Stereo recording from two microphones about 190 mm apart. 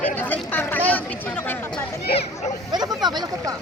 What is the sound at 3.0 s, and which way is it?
Speech, 20° right (ahead or behind).